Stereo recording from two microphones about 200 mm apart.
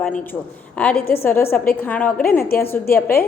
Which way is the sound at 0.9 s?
50° left (ahead or behind).